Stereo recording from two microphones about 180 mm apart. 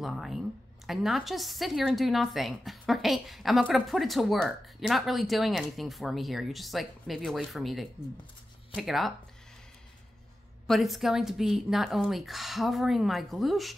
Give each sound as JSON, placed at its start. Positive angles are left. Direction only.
{"t": 0.0, "sound": "a woman's voice", "side_deg": 0}
{"t": 10.7, "sound": "a woman's voice", "side_deg": 0}